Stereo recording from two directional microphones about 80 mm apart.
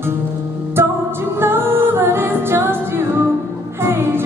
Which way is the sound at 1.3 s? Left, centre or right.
Right.